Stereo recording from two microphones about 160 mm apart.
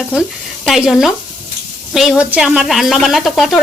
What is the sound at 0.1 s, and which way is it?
Speech, 5° right (ahead or behind).